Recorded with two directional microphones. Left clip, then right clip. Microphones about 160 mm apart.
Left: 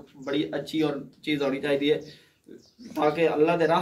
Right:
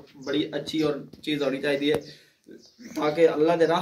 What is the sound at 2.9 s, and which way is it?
Speech, 30° left (ahead or behind).